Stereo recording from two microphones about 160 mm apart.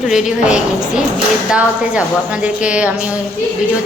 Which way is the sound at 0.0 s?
5° right (ahead or behind).